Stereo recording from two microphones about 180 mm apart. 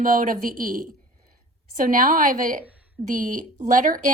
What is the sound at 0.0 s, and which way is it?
A woman's voice, 50° right (ahead or behind).